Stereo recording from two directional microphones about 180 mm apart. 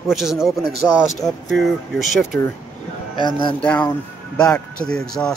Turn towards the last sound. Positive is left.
turn(degrees=5)  # may be behind; listen again after turning